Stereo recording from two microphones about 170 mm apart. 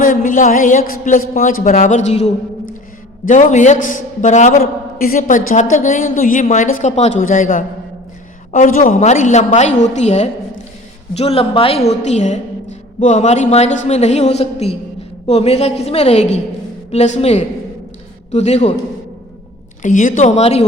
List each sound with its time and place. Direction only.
0.0 s a man's voice: 50° left (ahead or behind)
19.8 s a man's voice: 50° left (ahead or behind)